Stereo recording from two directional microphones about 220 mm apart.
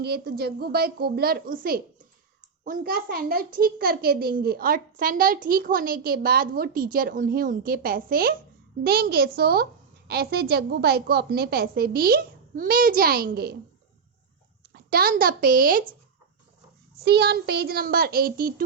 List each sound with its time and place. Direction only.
0.0 s a woman's voice: 45° right (ahead or behind)
14.7 s a woman's voice: 45° right (ahead or behind)
17.0 s a woman's voice: 45° right (ahead or behind)